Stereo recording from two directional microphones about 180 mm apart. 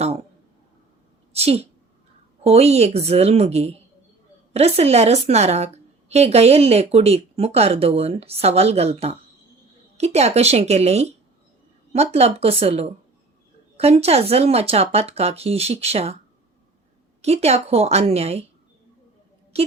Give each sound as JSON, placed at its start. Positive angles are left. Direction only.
{"t": 1.3, "sound": "a sound", "side_deg": -35}
{"t": 2.4, "sound": "a woman's voice", "side_deg": -35}
{"t": 17.2, "sound": "a woman's voice", "side_deg": -35}